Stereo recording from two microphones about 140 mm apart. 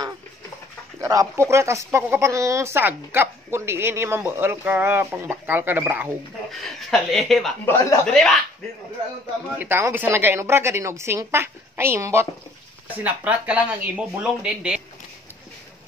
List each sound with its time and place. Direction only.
1.0 s speech: 20° right (ahead or behind)
6.9 s a woman's voice: centre (ahead or behind)
7.6 s speech: 20° left (ahead or behind)
8.0 s a woman's voice: 5° left (ahead or behind)
9.6 s speech: 15° right (ahead or behind)